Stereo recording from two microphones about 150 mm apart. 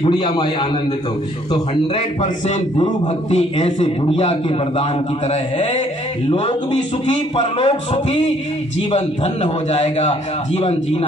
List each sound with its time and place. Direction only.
0.0 s a man's voice: 30° left (ahead or behind)
3.8 s a man's voice: 40° left (ahead or behind)